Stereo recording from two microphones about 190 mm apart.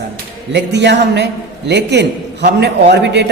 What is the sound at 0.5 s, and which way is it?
A man's voice, 65° right (ahead or behind).